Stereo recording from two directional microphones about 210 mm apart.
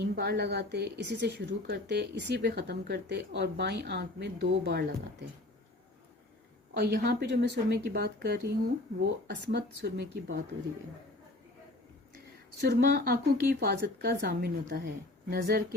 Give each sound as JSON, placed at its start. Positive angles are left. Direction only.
{"t": 0.0, "sound": "a woman's voice", "side_deg": -50}
{"t": 6.7, "sound": "a woman's voice", "side_deg": -50}
{"t": 12.6, "sound": "a woman's voice", "side_deg": -50}